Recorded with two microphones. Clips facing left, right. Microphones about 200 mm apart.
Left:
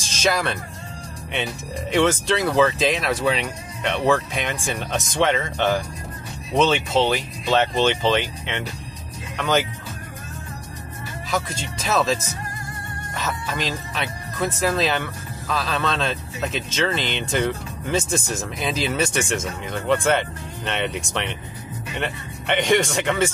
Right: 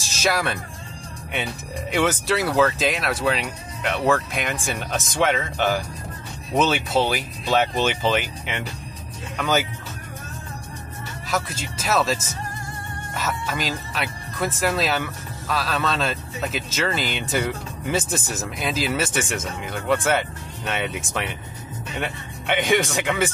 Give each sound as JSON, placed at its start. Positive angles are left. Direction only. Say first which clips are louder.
{"t": 0.2, "sound": "speech", "louder": "left 1 dB", "side_deg": -5}
{"t": 11.2, "sound": "speech", "louder": "left 1 dB", "side_deg": 0}